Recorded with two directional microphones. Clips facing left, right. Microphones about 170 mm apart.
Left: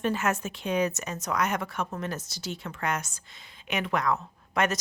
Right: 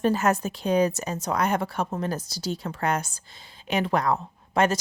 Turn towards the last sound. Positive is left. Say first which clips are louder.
# right 5 dB
turn(degrees=-30)  # may be behind; listen again after turning